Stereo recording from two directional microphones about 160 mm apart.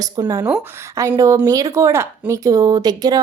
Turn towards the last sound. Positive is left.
turn(degrees=-25)  # may be behind; listen again after turning